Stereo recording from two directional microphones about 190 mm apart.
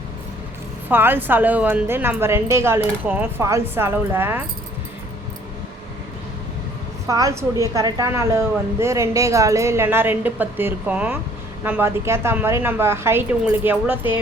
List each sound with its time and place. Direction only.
0.9 s a woman's voice: 10° right (ahead or behind)
7.1 s a woman's voice: 15° right (ahead or behind)